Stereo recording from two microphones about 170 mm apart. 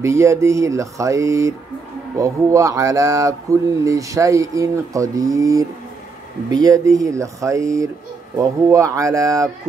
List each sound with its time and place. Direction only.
0.0 s speech: 15° right (ahead or behind)